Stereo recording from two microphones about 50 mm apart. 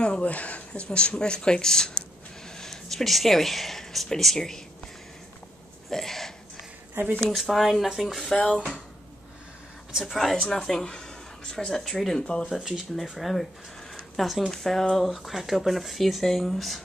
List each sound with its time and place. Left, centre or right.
0.0 s speech: left; by 4.6 s centre
5.9 s speech: centre
7.0 s speech: right
7.2 s speech: centre
8.4 s speech: centre
10.0 s speech: centre
10.3 s speech: centre
12.4 s speech: centre